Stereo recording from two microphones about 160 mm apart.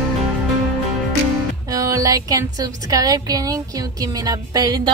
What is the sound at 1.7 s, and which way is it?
Music, 20° right (ahead or behind).